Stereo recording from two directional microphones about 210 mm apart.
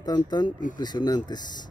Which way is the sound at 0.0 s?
20° left (ahead or behind).